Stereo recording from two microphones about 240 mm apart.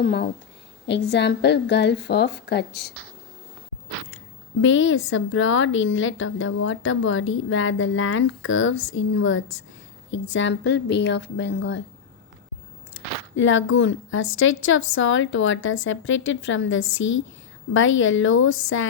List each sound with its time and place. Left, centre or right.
0.0 s a woman's voice: left
4.6 s a woman's voice: left
13.3 s a woman's voice: left